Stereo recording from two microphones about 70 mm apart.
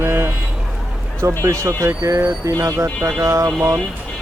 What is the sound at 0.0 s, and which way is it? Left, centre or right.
Vehicle, right.